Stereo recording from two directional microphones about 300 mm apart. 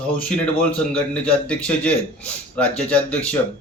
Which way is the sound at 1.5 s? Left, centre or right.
Centre.